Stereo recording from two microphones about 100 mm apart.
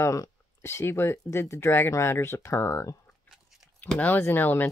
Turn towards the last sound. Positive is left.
turn(degrees=20)  # may be behind; listen again after turning